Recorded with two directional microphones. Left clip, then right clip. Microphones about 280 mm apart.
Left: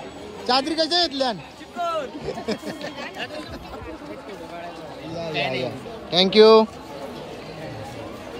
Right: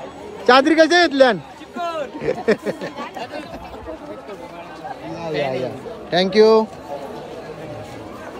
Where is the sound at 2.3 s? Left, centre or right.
Centre.